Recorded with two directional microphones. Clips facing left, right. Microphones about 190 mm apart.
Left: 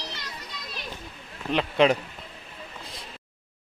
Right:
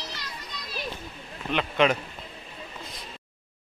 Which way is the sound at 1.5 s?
30° left (ahead or behind).